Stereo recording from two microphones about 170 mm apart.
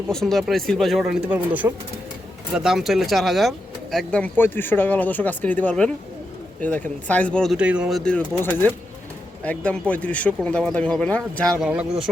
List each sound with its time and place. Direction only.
0.1 s speech: centre (ahead or behind)
11.6 s speech: 5° right (ahead or behind)